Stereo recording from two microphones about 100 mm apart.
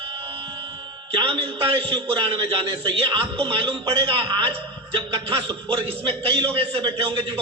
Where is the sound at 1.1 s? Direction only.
55° right (ahead or behind).